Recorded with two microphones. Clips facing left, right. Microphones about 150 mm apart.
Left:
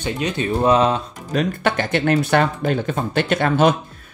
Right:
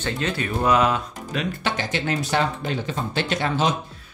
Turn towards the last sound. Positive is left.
turn(degrees=55)  # may be behind; listen again after turning